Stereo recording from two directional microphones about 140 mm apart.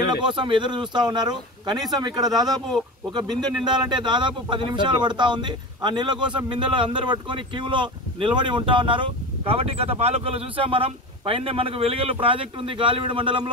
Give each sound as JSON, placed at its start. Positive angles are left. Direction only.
{"t": 0.0, "sound": "a man's voice", "side_deg": -30}